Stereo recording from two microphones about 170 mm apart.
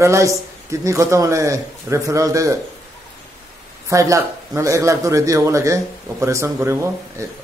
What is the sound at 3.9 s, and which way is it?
A man's voice, 20° right (ahead or behind).